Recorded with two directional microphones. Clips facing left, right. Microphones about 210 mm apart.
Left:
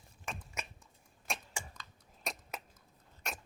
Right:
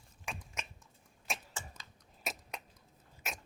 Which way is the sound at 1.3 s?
Centre (ahead or behind).